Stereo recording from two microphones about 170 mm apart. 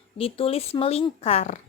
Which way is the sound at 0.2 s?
35° left (ahead or behind).